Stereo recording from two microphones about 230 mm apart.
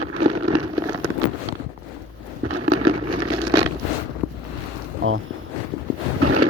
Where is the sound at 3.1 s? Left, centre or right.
Right.